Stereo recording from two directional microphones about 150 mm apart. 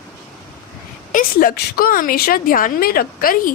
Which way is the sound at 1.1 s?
70° left (ahead or behind).